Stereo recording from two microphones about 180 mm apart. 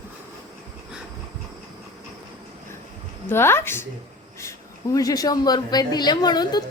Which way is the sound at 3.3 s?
15° left (ahead or behind).